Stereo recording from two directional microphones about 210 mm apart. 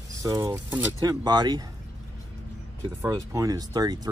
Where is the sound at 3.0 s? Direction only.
15° right (ahead or behind).